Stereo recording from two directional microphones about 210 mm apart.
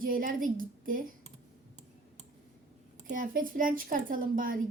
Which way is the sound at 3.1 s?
40° right (ahead or behind).